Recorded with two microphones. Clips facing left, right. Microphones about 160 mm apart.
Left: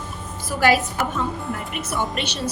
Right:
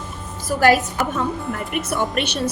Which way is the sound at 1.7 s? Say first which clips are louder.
Right 5 dB; 55° right (ahead or behind).